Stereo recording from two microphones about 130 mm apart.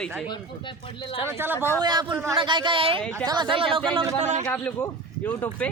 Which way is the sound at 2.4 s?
35° right (ahead or behind).